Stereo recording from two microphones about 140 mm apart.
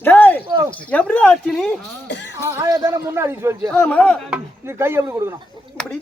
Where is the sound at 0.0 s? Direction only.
10° left (ahead or behind).